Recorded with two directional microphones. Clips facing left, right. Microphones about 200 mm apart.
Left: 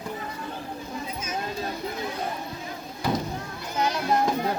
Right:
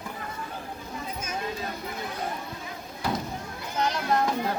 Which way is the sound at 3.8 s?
10° left (ahead or behind).